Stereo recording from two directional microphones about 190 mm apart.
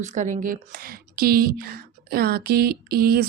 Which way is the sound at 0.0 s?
40° right (ahead or behind).